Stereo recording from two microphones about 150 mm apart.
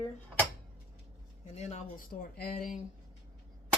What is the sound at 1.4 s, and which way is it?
Speech, 50° left (ahead or behind).